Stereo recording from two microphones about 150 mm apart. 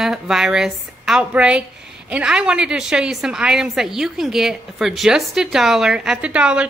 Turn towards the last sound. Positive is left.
turn(degrees=-5)  # may be behind; listen again after turning